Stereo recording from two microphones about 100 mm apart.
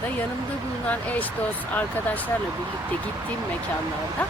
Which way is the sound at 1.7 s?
15° left (ahead or behind).